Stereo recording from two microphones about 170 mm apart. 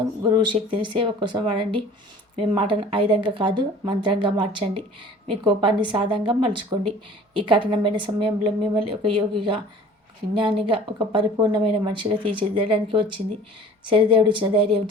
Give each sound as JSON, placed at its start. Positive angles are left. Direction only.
{"t": 0.2, "sound": "speech", "side_deg": -30}